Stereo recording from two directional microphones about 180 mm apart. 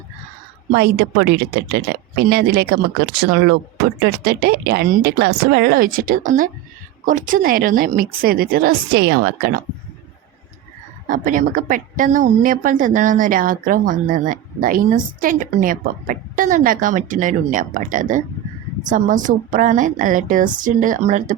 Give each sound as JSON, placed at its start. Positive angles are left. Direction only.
{"t": 0.7, "sound": "a woman's voice", "side_deg": -60}
{"t": 11.1, "sound": "a woman's voice", "side_deg": -45}